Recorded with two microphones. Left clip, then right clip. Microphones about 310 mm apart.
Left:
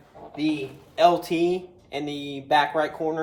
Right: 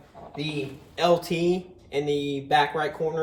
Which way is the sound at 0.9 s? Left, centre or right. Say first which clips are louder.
Left 3 dB; centre.